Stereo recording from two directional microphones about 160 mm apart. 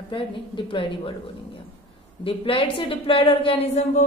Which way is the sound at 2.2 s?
35° left (ahead or behind).